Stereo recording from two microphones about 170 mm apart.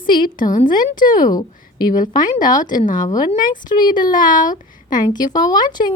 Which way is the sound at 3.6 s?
25° left (ahead or behind).